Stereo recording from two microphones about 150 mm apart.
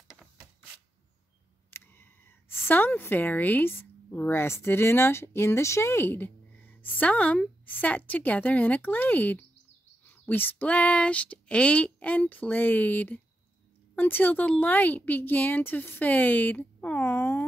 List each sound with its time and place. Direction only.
1.7 s a woman's voice: 15° left (ahead or behind)